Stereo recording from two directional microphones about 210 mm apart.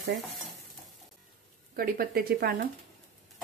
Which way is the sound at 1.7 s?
45° right (ahead or behind).